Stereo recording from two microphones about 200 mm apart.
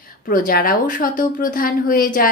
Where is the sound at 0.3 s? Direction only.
45° left (ahead or behind).